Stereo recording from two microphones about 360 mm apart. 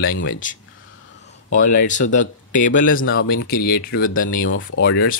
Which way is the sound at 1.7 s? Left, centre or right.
Left.